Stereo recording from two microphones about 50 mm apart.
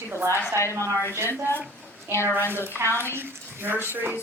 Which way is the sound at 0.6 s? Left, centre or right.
Left.